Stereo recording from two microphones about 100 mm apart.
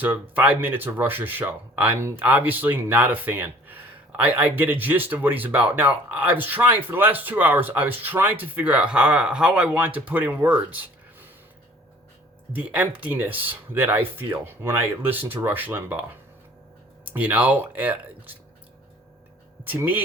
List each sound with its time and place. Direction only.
0.0 s speech: 15° right (ahead or behind)
12.5 s speech: 15° right (ahead or behind)
17.1 s speech: 15° right (ahead or behind)
19.6 s speech: 20° right (ahead or behind)